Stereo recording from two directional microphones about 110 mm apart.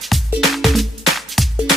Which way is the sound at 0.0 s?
Centre (ahead or behind).